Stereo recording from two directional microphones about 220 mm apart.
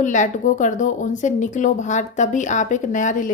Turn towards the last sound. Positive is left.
turn(degrees=35)  # may be behind; listen again after turning